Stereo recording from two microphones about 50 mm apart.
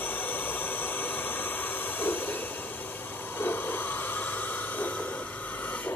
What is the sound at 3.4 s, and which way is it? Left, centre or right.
Snort, left.